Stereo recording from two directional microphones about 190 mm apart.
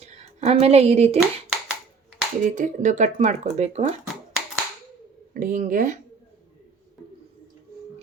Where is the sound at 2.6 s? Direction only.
40° right (ahead or behind).